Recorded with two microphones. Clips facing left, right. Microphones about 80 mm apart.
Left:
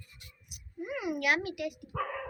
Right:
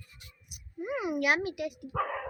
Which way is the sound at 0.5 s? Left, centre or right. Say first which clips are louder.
Right 3 dB; right.